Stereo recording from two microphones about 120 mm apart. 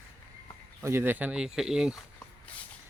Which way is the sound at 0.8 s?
20° right (ahead or behind).